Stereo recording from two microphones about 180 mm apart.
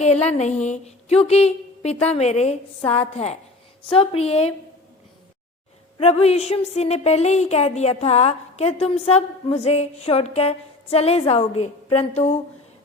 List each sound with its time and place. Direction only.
0.0 s a woman's voice: 35° left (ahead or behind)
6.0 s a woman's voice: 35° left (ahead or behind)